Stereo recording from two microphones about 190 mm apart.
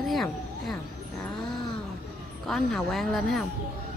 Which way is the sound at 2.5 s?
Centre (ahead or behind).